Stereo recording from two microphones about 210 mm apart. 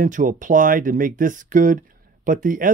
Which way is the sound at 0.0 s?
40° right (ahead or behind).